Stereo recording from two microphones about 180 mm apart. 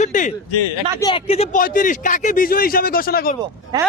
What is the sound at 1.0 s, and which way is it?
Speech, 25° left (ahead or behind).